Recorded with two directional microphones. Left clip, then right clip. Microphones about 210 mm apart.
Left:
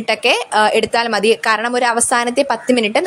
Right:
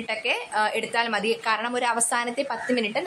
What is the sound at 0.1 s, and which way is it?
A woman's voice, 45° left (ahead or behind).